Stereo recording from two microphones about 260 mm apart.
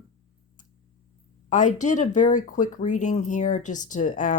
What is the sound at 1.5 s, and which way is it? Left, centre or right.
Speech, left.